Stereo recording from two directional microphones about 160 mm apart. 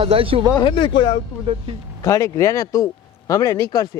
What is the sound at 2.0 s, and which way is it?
Speech, 20° left (ahead or behind).